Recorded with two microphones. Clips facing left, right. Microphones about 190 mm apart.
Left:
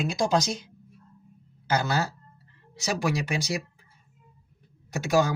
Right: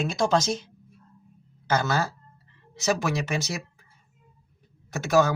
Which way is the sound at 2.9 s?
10° left (ahead or behind).